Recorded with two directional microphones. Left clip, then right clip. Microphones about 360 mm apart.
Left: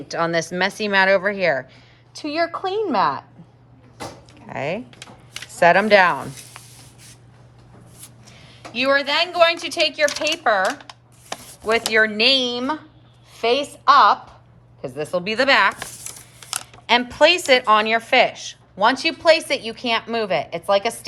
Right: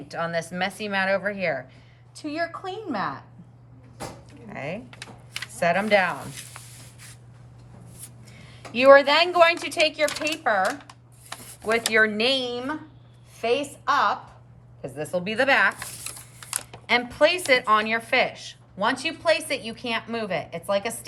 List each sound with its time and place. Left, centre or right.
0.1 s a woman's voice: centre
4.4 s a woman's voice: centre
8.3 s a woman's voice: centre
16.8 s a woman's voice: centre